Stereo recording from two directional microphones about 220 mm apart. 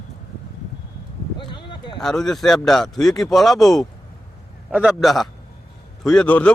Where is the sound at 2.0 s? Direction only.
Centre (ahead or behind).